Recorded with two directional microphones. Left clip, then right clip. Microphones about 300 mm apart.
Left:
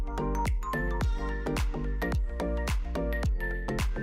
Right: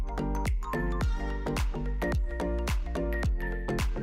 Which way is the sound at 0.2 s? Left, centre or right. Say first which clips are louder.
Left 3 dB; centre.